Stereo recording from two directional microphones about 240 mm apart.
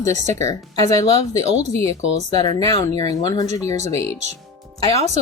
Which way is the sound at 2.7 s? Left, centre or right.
Centre.